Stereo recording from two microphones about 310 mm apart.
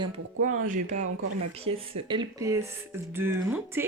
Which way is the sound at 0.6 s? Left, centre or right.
Right.